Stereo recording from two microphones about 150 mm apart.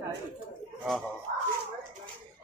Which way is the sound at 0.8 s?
Centre (ahead or behind).